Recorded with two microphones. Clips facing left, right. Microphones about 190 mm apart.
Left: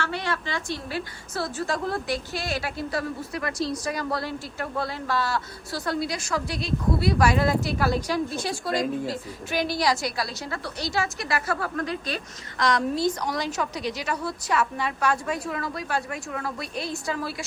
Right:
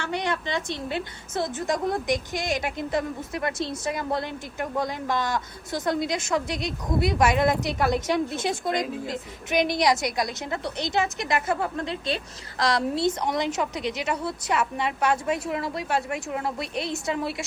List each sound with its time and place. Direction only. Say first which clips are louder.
0.0 s a woman's voice: right 1 dB; 15° right (ahead or behind)